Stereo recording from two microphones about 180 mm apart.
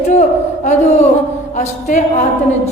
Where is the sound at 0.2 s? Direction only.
40° left (ahead or behind).